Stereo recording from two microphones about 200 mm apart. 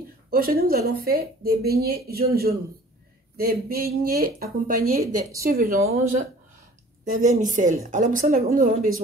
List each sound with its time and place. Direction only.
0.3 s a woman's voice: 45° right (ahead or behind)